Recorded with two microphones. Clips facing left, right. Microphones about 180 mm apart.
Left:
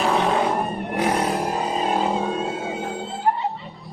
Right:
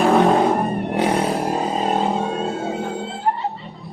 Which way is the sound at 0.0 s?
50° right (ahead or behind).